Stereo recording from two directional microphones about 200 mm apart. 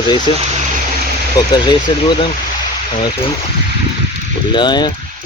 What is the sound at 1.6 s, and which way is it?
Speech, 25° left (ahead or behind).